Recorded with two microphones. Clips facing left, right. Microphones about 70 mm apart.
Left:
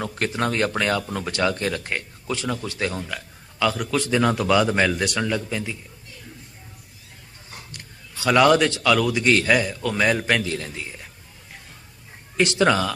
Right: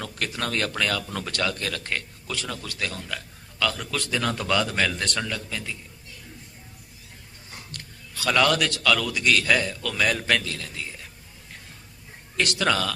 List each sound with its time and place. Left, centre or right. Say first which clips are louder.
0.2 s a man's voice: left 5 dB; left
3.1 s a man's voice: left 2 dB; centre
4.4 s a man's voice: left 3 dB; centre
4.6 s a man's voice: left 5 dB; left
7.7 s a man's voice: even; centre
12.4 s a man's voice: left 5 dB; left